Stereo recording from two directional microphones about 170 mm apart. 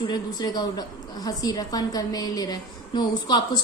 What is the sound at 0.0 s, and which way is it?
A woman's voice, 25° left (ahead or behind).